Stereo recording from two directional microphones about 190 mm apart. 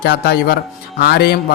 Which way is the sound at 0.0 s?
55° left (ahead or behind).